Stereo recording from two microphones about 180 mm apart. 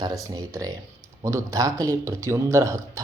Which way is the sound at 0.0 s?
20° right (ahead or behind).